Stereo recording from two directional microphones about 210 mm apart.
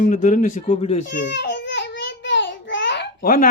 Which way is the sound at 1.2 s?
55° left (ahead or behind).